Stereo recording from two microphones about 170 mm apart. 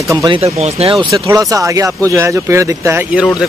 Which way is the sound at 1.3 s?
20° right (ahead or behind).